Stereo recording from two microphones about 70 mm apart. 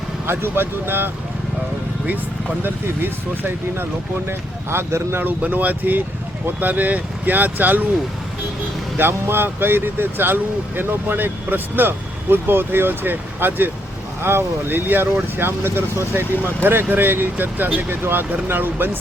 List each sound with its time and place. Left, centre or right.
0.3 s speech: right
2.6 s speech: right
5.2 s speech: right
9.0 s speech: right